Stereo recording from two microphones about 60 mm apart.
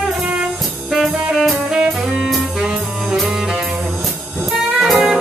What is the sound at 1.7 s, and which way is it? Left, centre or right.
Music, centre.